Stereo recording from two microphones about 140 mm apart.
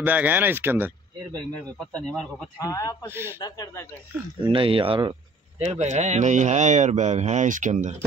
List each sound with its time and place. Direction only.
0.0 s speech: 10° right (ahead or behind)
1.5 s speech: 5° left (ahead or behind)
2.6 s a man's voice: 25° left (ahead or behind)
4.4 s speech: 40° right (ahead or behind)
5.7 s speech: 55° right (ahead or behind)